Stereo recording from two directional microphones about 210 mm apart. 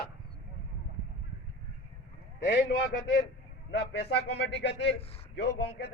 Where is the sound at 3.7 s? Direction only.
55° left (ahead or behind).